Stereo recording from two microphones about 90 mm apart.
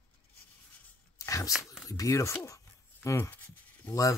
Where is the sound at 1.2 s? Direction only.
35° left (ahead or behind).